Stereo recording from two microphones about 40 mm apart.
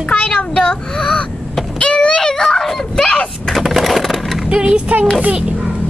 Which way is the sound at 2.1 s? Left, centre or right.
Centre.